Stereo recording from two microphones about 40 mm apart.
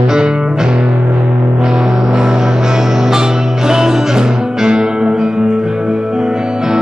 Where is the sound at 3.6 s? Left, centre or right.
Centre.